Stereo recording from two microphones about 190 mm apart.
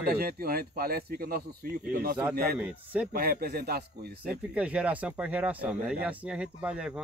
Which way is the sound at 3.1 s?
50° right (ahead or behind).